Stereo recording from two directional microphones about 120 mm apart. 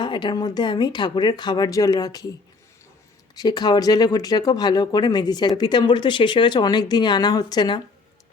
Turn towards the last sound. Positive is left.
turn(degrees=40)  # may be behind; listen again after turning